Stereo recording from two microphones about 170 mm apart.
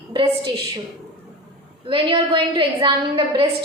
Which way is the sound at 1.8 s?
30° right (ahead or behind).